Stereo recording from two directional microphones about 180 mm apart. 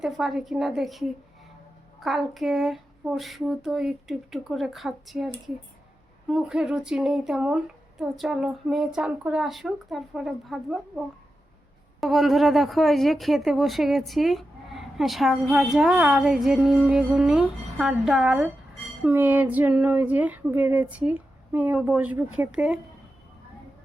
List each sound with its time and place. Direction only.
0.0 s speech: centre (ahead or behind)